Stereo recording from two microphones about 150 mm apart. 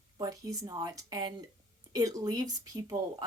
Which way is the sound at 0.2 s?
25° right (ahead or behind).